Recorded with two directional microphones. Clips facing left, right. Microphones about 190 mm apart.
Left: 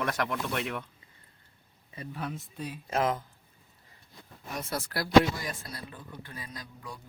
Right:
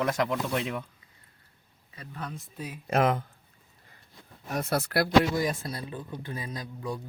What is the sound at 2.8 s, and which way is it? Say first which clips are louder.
Speech: right 4 dB; 65° right (ahead or behind).